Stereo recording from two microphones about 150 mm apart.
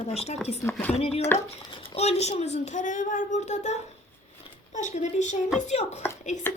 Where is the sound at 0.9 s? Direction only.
45° left (ahead or behind).